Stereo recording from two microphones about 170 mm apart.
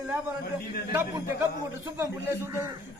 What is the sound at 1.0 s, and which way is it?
A man's voice, 15° right (ahead or behind).